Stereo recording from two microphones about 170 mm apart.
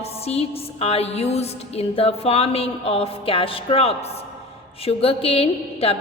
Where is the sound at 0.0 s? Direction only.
35° left (ahead or behind).